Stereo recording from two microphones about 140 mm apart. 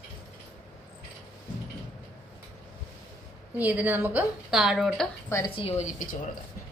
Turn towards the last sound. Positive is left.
turn(degrees=70)  # may be behind; listen again after turning